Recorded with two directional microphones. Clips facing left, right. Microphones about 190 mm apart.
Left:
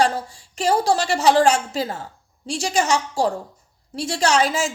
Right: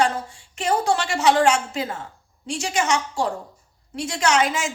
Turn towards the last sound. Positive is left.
turn(degrees=35)  # may be behind; listen again after turning